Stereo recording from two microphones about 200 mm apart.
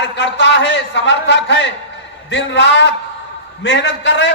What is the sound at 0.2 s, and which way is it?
A man's voice, 60° left (ahead or behind).